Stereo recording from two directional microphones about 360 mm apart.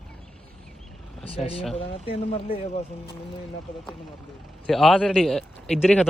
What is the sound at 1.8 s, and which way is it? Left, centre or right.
Speech, centre.